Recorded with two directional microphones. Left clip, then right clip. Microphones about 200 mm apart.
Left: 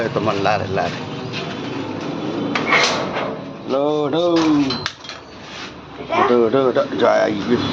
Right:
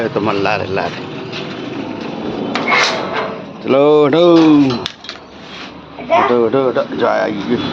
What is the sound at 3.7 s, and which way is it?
Speech, 45° right (ahead or behind).